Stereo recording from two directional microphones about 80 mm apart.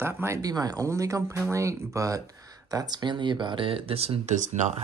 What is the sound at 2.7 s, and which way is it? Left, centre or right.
Speech, right.